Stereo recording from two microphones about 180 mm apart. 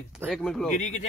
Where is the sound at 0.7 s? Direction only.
40° left (ahead or behind).